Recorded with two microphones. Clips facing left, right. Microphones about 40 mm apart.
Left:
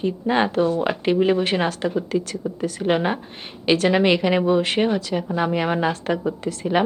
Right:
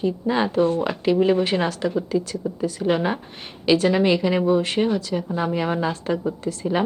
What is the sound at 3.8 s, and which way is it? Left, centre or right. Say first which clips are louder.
Speech: left 1 dB; left.